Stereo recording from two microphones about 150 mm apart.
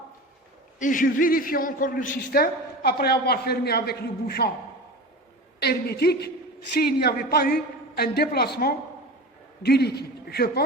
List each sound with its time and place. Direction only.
0.8 s a man's voice: 60° left (ahead or behind); by 4.4 s 90° left
5.5 s a woman's voice: 90° left